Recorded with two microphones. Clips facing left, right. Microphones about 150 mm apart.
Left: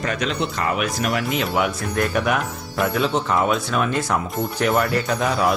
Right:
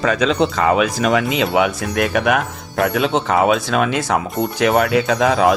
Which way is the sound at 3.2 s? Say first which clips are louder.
Right 5 dB; 80° right.